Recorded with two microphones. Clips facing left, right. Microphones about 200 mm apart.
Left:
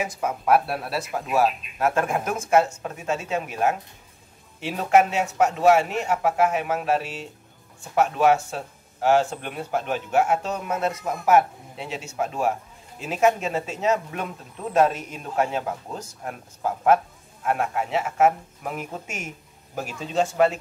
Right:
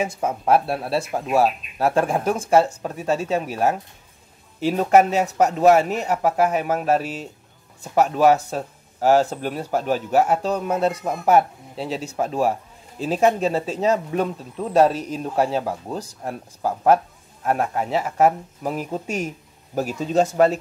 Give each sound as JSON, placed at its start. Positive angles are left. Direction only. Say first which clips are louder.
{"t": 0.0, "sound": "speech", "louder": "right 3 dB", "side_deg": -30}